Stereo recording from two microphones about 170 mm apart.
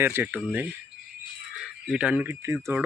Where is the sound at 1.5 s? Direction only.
5° right (ahead or behind).